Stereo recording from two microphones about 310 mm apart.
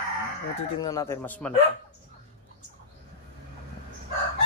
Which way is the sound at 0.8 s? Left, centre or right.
Centre.